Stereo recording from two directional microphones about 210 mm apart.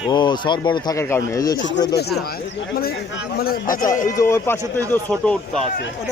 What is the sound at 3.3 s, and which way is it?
Speech, 45° left (ahead or behind).